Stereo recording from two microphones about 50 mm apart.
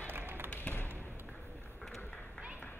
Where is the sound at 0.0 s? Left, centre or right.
Right.